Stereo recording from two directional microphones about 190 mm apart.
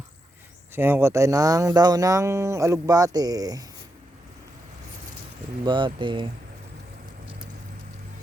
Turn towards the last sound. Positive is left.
turn(degrees=-25)  # may be behind; listen again after turning